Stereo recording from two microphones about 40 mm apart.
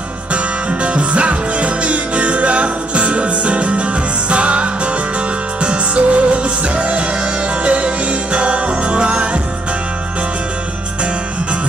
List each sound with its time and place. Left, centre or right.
0.3 s music: right